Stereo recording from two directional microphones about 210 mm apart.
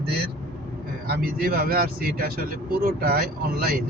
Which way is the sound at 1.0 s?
45° right (ahead or behind).